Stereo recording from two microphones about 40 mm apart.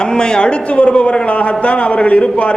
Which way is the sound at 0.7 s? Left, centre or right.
Left.